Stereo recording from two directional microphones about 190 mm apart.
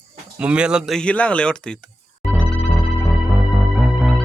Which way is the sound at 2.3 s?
5° left (ahead or behind).